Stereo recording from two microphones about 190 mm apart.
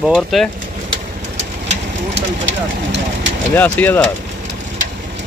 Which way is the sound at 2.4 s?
75° right (ahead or behind).